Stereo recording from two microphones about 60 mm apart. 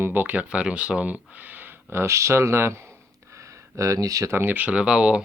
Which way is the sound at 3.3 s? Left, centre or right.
Right.